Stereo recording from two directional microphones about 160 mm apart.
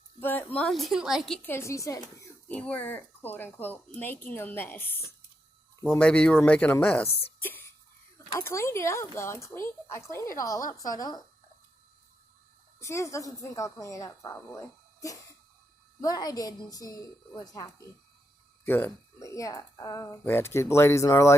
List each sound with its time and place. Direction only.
0.2 s a woman's voice: 10° left (ahead or behind)
1.5 s speech: 15° left (ahead or behind)
7.1 s speech: 40° left (ahead or behind)
7.4 s whispering: 15° left (ahead or behind)
8.3 s speech: 15° left (ahead or behind)
12.8 s a woman's voice: 20° left (ahead or behind)
16.0 s a woman's voice: 25° left (ahead or behind)